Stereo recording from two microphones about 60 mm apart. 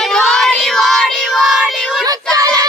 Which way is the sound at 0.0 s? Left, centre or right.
Centre.